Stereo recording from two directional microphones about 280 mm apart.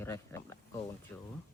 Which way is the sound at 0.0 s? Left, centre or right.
Centre.